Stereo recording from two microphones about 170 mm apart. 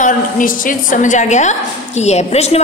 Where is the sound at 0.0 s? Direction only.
50° left (ahead or behind).